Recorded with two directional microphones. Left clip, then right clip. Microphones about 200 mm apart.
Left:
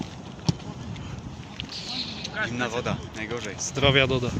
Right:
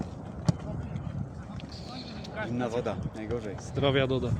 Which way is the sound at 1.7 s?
50° right (ahead or behind).